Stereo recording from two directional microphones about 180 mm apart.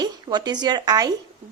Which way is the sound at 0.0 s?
25° right (ahead or behind).